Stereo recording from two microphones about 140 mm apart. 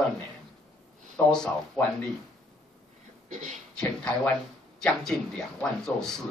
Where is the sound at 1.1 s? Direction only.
5° left (ahead or behind).